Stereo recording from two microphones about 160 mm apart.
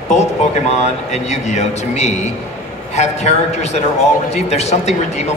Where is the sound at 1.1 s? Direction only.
45° left (ahead or behind).